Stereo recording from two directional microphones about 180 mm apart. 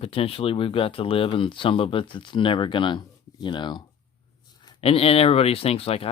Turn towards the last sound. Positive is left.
turn(degrees=30)  # may be behind; listen again after turning